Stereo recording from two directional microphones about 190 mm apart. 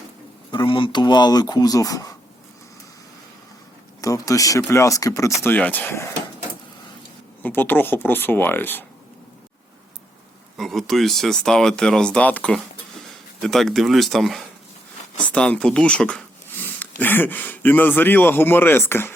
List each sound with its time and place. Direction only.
0.5 s speech: 25° left (ahead or behind)
4.0 s a man's voice: 15° left (ahead or behind)
7.4 s a man's voice: 10° left (ahead or behind)
10.6 s speech: centre (ahead or behind)
15.2 s a sound: 5° left (ahead or behind)
17.0 s a man's voice: 10° left (ahead or behind)